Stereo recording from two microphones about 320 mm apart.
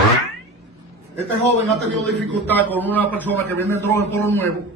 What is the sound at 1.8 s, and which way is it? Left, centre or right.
Speech, right.